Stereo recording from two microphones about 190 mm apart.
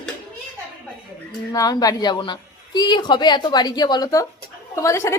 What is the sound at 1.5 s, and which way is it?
A man's voice, 20° left (ahead or behind).